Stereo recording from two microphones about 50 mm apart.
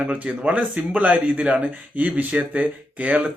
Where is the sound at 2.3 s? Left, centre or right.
Right.